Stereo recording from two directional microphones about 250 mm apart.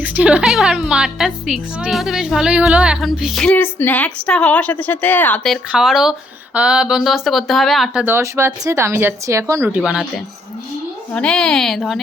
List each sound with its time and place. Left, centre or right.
0.0 s a woman's voice: centre
11.1 s a woman's voice: centre